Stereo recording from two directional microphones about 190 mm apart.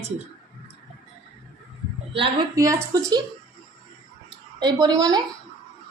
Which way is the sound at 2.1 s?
30° right (ahead or behind).